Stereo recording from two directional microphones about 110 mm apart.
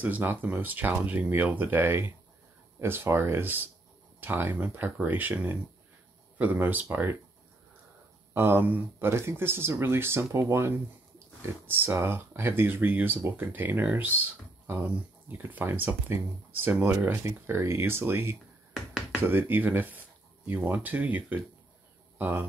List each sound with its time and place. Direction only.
0.0 s speech: 15° right (ahead or behind)
8.3 s speech: 20° right (ahead or behind)
15.3 s speech: 20° right (ahead or behind)
18.7 s finger snapping: 5° right (ahead or behind)
19.2 s speech: 20° right (ahead or behind)